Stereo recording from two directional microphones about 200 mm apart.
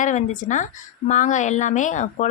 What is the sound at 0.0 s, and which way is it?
A woman's voice, 40° left (ahead or behind).